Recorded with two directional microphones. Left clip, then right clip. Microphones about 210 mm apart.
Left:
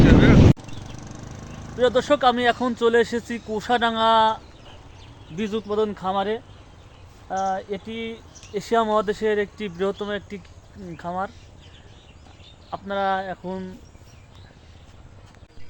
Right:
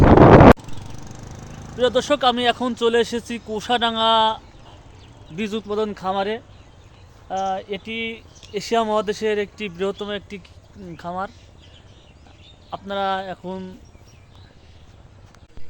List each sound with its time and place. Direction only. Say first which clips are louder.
0.6 s vehicle: even; 55° right (ahead or behind)
1.8 s speech: even; centre (ahead or behind)
5.4 s speech: even; 5° right (ahead or behind)
7.9 s speech: right 4 dB; 35° left (ahead or behind)
8.1 s speech: right 1 dB; centre (ahead or behind)
12.7 s speech: even; 5° right (ahead or behind)